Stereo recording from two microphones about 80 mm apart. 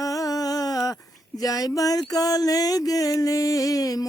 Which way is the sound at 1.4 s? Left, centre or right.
Left.